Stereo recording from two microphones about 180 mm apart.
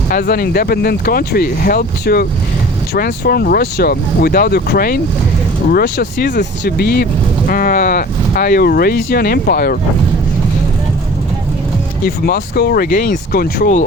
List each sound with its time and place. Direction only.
0.1 s speech: 55° left (ahead or behind)
12.0 s speech: 60° left (ahead or behind)